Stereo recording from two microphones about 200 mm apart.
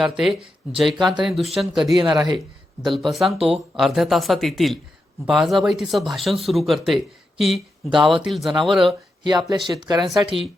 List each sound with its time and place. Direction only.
0.0 s speech: centre (ahead or behind)
2.0 s speech: 20° right (ahead or behind)
2.8 s speech: centre (ahead or behind)
9.2 s speech: 20° right (ahead or behind)